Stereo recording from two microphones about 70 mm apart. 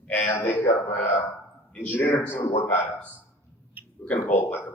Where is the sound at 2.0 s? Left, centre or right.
Left.